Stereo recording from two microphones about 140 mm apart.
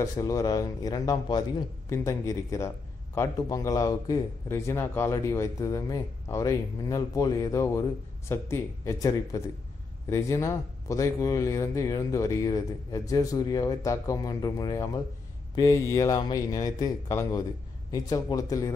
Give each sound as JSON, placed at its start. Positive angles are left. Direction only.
{"t": 0.0, "sound": "speech", "side_deg": 25}